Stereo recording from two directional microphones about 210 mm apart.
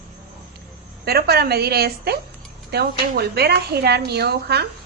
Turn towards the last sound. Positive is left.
turn(degrees=-50)  # may be behind; listen again after turning